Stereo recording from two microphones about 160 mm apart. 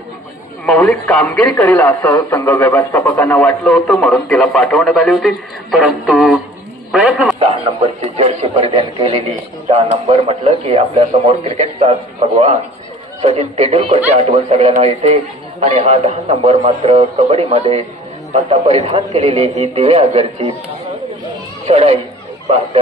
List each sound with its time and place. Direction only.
1.0 s a man's voice: 5° left (ahead or behind)
7.3 s a man's voice: 40° right (ahead or behind)
13.2 s a man's voice: 45° right (ahead or behind)
21.6 s a man's voice: 40° right (ahead or behind)